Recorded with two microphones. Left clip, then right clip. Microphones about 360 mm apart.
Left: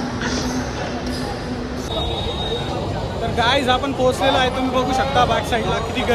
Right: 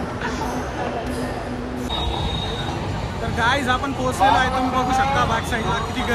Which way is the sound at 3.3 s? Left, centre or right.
Centre.